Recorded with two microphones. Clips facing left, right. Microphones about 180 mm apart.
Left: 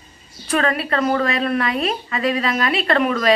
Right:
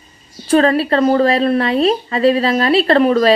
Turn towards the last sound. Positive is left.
turn(degrees=-35)  # may be behind; listen again after turning